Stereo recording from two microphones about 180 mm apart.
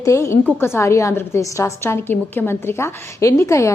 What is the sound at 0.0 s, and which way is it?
A woman's voice, 15° left (ahead or behind).